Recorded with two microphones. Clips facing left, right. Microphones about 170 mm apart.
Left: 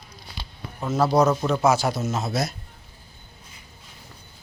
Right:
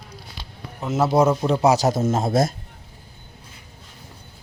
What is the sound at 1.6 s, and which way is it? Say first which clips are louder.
Speech: right 5 dB; 35° right (ahead or behind).